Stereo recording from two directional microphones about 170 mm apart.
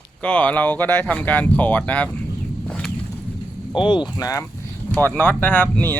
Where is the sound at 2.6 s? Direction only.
5° left (ahead or behind).